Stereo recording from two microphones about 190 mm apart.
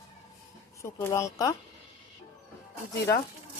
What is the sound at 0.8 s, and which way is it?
Speech, 15° left (ahead or behind).